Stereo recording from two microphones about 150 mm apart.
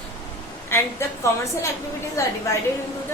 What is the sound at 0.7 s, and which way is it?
A woman's voice, 20° left (ahead or behind).